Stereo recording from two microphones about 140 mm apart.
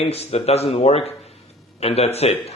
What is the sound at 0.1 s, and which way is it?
A man's voice, 45° left (ahead or behind).